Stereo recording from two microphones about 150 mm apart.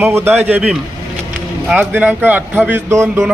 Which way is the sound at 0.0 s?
15° right (ahead or behind).